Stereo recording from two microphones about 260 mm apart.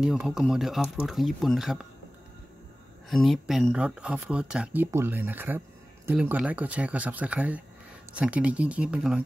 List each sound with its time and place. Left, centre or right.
0.0 s speech: centre
3.1 s speech: centre